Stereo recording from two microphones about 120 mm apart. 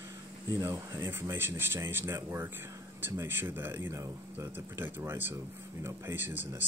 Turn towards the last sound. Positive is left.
turn(degrees=-15)  # may be behind; listen again after turning